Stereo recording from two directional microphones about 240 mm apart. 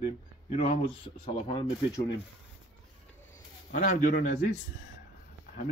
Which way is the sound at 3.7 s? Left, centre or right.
Left.